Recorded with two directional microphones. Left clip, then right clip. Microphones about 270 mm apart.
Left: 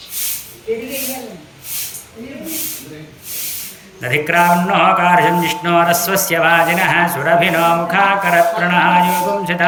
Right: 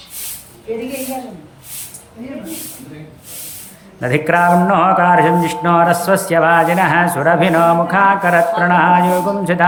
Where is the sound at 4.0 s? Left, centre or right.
Centre.